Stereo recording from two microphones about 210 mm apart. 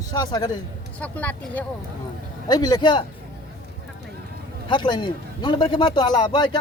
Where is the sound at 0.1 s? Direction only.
20° left (ahead or behind).